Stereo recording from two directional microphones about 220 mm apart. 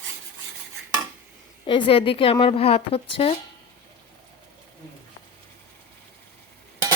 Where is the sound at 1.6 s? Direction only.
25° left (ahead or behind).